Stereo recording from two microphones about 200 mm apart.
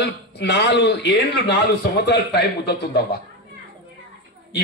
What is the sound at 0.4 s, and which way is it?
A man's voice, 55° left (ahead or behind).